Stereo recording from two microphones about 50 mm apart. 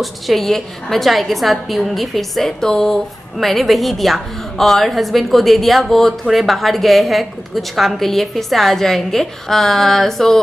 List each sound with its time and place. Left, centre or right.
0.0 s a woman's voice: centre